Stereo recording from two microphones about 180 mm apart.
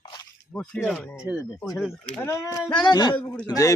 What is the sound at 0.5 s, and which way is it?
Speech, 5° left (ahead or behind).